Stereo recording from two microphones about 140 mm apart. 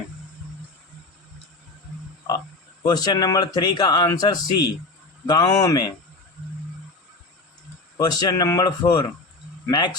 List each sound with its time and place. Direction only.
2.8 s speech: 30° left (ahead or behind)
7.9 s speech: 30° left (ahead or behind)